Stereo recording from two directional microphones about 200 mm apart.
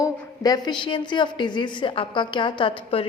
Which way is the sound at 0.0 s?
20° left (ahead or behind).